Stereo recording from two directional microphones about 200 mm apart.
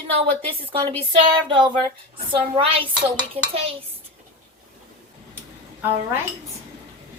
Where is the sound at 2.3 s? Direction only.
25° right (ahead or behind).